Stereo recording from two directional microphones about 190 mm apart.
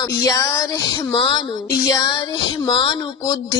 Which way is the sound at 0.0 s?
20° left (ahead or behind).